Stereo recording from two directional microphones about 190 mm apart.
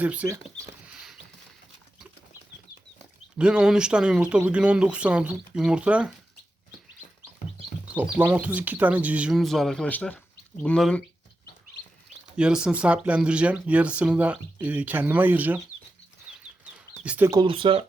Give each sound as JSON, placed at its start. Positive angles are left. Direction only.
{"t": 0.0, "sound": "speech", "side_deg": -10}
{"t": 3.3, "sound": "speech", "side_deg": -5}
{"t": 8.2, "sound": "speech", "side_deg": -10}
{"t": 12.4, "sound": "speech", "side_deg": -5}
{"t": 16.3, "sound": "chicken", "side_deg": -5}
{"t": 17.4, "sound": "speech", "side_deg": -25}